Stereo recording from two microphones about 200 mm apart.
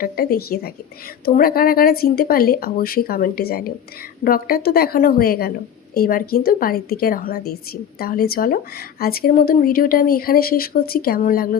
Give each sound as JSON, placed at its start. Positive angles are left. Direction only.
{"t": 0.0, "sound": "a woman's voice", "side_deg": 45}